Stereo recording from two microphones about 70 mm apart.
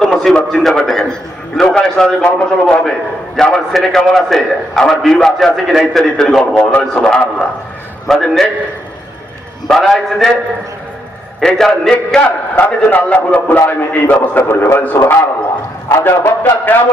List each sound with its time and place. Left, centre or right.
0.0 s a sound: centre
0.4 s a man's voice: centre
6.6 s a man's voice: left
8.0 s a man's voice: centre
9.6 s a man's voice: centre
11.3 s a man's voice: centre
12.2 s a man's voice: left